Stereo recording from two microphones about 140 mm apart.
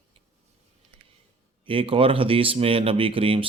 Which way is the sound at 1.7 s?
40° right (ahead or behind).